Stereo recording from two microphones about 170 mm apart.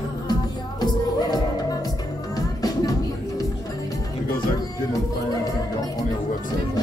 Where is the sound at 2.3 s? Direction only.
20° left (ahead or behind).